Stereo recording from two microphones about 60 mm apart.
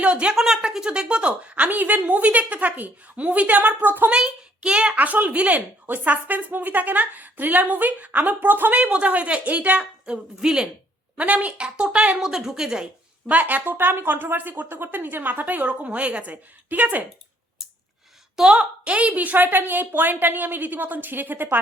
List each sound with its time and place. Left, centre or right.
0.0 s a sound: centre
0.3 s speech: centre; by 4.1 s right
4.1 s a child's voice: centre
4.9 s speech: right
8.7 s speech: right
11.2 s speech: right
13.2 s speech: right
18.3 s a woman's voice: centre; by 21.6 s right